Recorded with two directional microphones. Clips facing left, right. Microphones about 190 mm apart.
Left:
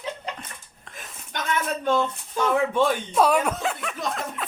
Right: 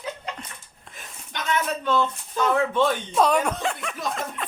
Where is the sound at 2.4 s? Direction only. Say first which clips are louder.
Even; 10° left (ahead or behind).